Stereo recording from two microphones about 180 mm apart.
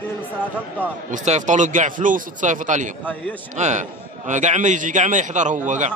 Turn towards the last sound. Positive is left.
turn(degrees=-45)  # may be behind; listen again after turning